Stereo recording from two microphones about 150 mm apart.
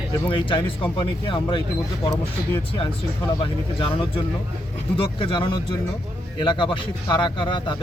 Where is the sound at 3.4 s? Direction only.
35° left (ahead or behind).